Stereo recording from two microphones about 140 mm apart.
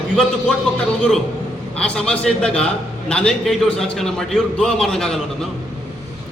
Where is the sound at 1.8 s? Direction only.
5° left (ahead or behind).